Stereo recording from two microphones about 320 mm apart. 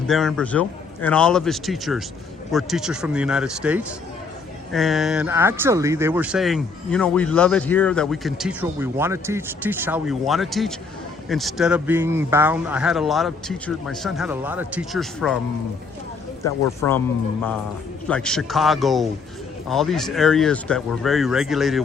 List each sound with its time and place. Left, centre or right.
0.1 s speech: centre
16.4 s a man's voice: centre
18.1 s speech: centre